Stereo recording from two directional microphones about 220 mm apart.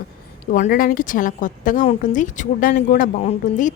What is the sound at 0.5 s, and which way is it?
A woman's voice, 40° left (ahead or behind).